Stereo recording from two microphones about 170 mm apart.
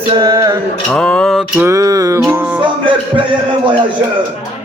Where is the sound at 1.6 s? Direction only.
20° right (ahead or behind).